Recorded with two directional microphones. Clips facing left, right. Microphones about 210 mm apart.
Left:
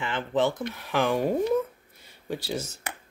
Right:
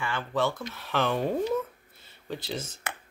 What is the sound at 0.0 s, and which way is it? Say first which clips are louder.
Speech: left 3 dB; 20° left (ahead or behind).